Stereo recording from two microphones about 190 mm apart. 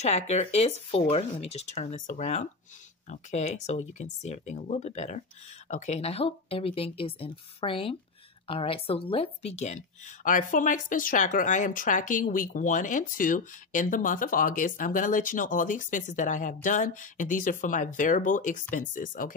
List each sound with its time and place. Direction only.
0.0 s speech: 35° left (ahead or behind)